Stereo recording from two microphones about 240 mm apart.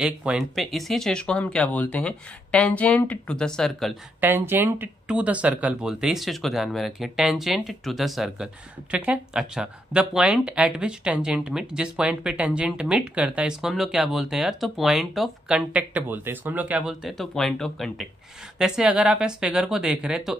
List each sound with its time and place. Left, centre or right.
0.0 s speech: centre